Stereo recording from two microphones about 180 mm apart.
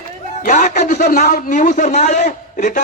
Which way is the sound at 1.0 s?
60° left (ahead or behind).